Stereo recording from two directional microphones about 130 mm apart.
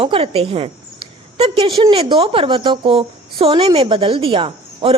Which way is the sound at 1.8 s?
40° right (ahead or behind).